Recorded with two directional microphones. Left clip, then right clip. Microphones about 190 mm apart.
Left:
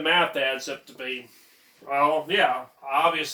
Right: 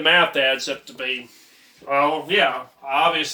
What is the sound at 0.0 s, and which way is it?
Speech, 20° right (ahead or behind).